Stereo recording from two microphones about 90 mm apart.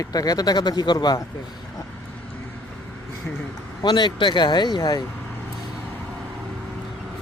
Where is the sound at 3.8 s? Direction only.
55° left (ahead or behind).